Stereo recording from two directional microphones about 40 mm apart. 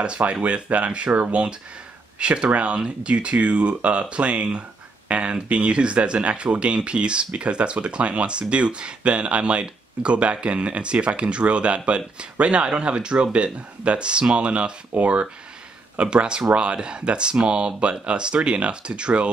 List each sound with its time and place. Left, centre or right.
0.0 s speech: right